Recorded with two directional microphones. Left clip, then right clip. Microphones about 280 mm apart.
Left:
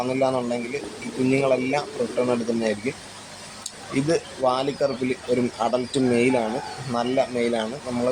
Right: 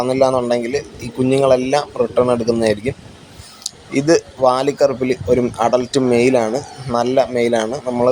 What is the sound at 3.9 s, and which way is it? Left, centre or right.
Speech, centre.